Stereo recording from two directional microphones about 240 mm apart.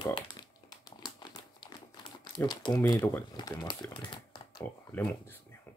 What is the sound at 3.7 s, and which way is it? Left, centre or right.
Speech, centre.